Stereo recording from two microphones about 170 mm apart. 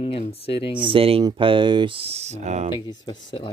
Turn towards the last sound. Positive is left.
turn(degrees=25)  # may be behind; listen again after turning